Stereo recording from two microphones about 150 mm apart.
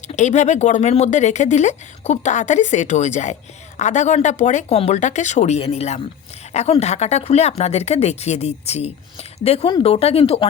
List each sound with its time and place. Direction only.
0.1 s speech: 50° left (ahead or behind)